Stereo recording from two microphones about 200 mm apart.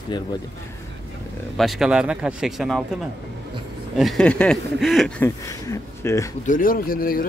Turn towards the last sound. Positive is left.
turn(degrees=45)  # may be behind; listen again after turning